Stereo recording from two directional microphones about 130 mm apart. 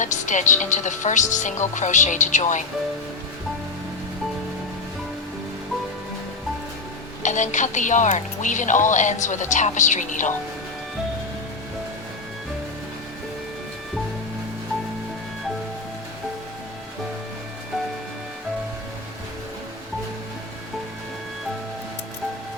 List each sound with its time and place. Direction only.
0.0 s speech: 70° left (ahead or behind)
7.2 s speech: 70° left (ahead or behind)